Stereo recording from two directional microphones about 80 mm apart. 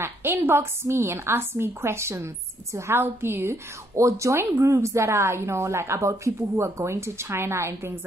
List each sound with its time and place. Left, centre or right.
0.0 s a woman's voice: right